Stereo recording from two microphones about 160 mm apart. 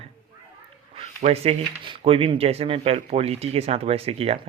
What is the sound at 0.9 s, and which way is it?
Speech, 40° right (ahead or behind).